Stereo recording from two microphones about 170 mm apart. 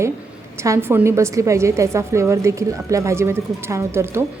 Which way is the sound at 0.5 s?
15° right (ahead or behind).